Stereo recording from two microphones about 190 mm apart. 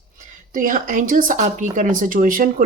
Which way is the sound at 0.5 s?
45° right (ahead or behind).